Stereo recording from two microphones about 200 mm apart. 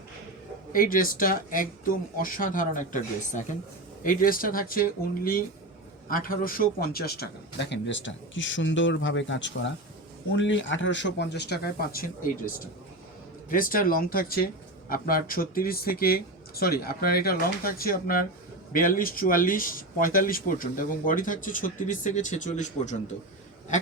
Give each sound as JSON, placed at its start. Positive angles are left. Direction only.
{"t": 0.7, "sound": "a man's voice", "side_deg": 45}